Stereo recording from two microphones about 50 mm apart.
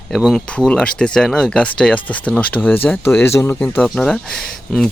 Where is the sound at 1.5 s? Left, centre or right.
Centre.